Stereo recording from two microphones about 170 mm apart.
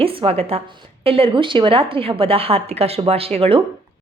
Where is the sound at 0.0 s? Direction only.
35° right (ahead or behind).